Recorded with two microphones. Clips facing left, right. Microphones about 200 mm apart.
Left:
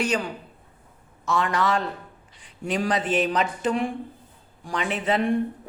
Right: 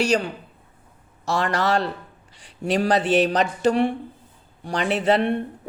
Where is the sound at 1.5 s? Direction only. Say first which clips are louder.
Right 2 dB; 75° right (ahead or behind).